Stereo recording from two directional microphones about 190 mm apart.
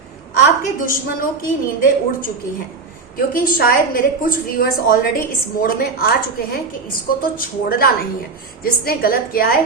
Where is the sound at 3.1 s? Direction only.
50° left (ahead or behind).